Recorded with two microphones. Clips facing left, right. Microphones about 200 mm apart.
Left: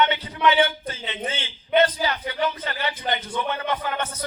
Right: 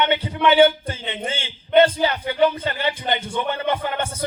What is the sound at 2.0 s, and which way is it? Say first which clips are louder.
Speech: right 6 dB; 25° right (ahead or behind).